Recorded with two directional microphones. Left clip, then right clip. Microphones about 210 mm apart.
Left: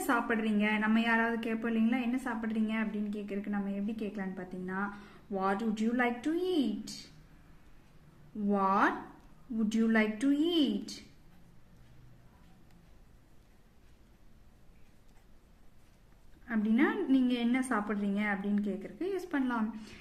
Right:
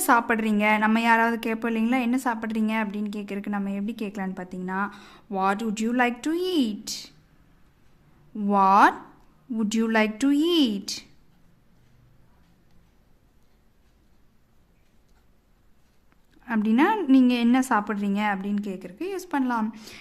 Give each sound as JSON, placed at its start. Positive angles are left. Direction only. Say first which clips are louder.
{"t": 0.1, "sound": "a woman's voice", "louder": "right 10 dB", "side_deg": -50}
{"t": 8.4, "sound": "a woman's voice", "louder": "right 11 dB", "side_deg": -50}
{"t": 16.5, "sound": "a woman's voice", "louder": "right 9 dB", "side_deg": -50}